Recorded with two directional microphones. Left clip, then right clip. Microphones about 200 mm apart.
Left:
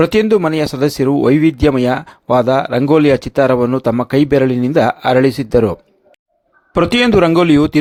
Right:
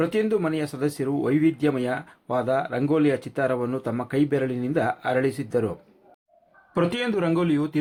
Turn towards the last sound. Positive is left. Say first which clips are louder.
# left 13 dB
turn(degrees=55)  # may be behind; listen again after turning